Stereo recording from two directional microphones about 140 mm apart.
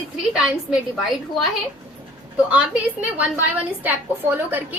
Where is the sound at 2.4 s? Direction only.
10° right (ahead or behind).